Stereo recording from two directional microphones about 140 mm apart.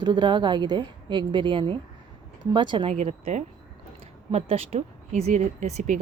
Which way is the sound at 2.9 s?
50° right (ahead or behind).